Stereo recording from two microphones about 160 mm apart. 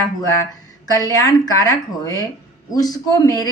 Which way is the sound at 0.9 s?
20° left (ahead or behind).